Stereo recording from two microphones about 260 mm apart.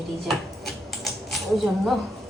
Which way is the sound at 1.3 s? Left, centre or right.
Centre.